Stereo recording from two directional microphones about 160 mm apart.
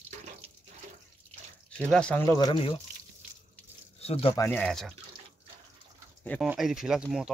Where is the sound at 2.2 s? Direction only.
20° left (ahead or behind).